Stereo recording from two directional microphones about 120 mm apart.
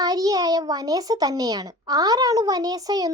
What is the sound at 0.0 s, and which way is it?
A child's voice, 30° right (ahead or behind).